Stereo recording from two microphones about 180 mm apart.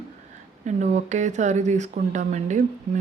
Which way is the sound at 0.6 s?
40° right (ahead or behind).